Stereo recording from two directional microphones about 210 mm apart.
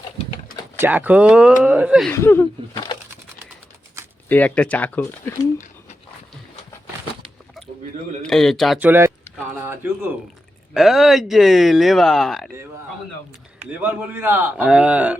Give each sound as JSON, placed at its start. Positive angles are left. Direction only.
{"t": 0.8, "sound": "a man's voice", "side_deg": -10}
{"t": 2.1, "sound": "speech", "side_deg": 15}
{"t": 4.3, "sound": "speech", "side_deg": 5}
{"t": 8.2, "sound": "speech", "side_deg": 0}
{"t": 10.8, "sound": "speech", "side_deg": 0}
{"t": 14.1, "sound": "a man's voice", "side_deg": -10}